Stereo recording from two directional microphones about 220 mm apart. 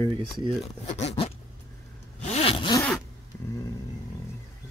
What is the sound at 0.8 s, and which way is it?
Speech, 30° left (ahead or behind).